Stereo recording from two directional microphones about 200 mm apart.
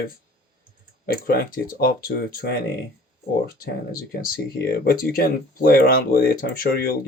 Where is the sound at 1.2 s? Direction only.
45° left (ahead or behind).